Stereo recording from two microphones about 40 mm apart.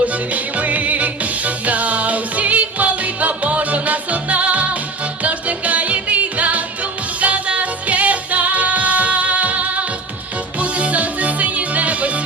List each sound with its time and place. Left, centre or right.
0.0 s music: right